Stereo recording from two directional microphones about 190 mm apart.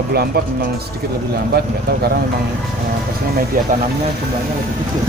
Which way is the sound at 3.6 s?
45° right (ahead or behind).